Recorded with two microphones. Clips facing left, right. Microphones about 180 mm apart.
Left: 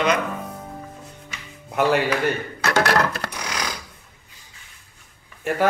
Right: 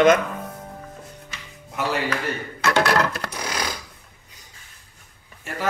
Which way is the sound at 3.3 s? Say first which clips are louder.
Right 1 dB; 30° right (ahead or behind).